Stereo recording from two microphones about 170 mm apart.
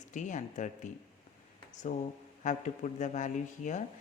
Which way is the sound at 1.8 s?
45° left (ahead or behind).